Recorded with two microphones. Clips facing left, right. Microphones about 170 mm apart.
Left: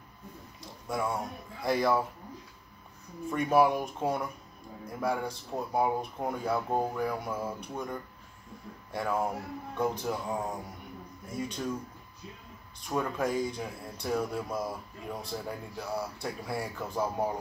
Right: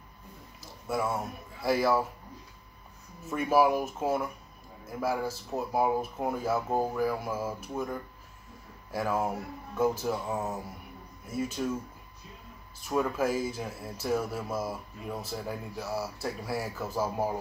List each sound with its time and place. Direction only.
0.6 s speech: 5° right (ahead or behind)
3.3 s speech: 5° right (ahead or behind)
12.8 s speech: 5° right (ahead or behind)